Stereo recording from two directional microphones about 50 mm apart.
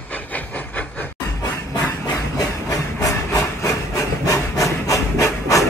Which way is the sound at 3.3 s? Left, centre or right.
Left.